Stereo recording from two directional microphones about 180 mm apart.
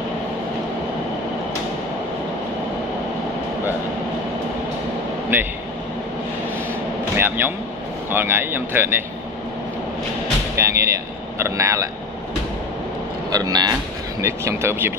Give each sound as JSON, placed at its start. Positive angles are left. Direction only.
{"t": 7.2, "sound": "a man's voice", "side_deg": -10}
{"t": 10.5, "sound": "speech", "side_deg": -15}
{"t": 13.3, "sound": "speech", "side_deg": -20}